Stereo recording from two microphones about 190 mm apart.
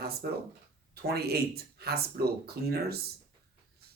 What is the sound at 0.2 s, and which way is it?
Speech, 55° right (ahead or behind).